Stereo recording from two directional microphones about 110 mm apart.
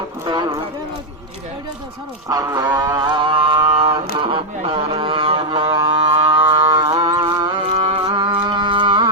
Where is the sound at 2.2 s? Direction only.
30° right (ahead or behind).